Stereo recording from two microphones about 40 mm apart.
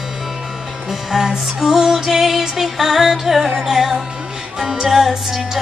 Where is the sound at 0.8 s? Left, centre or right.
Centre.